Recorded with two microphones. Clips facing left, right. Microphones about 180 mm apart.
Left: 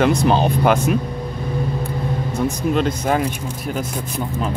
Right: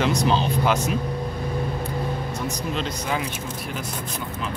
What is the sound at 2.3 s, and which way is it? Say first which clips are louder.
Speech: left 8 dB; 50° left (ahead or behind).